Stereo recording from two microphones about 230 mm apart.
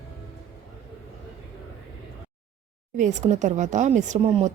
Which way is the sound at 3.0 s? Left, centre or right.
Right.